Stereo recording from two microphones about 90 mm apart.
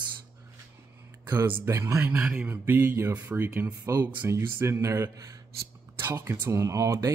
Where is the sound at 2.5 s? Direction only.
25° right (ahead or behind).